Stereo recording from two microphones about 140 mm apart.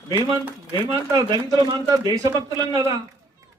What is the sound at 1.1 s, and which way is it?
A man's voice, 30° right (ahead or behind).